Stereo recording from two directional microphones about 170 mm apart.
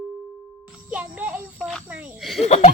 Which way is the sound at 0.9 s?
10° right (ahead or behind).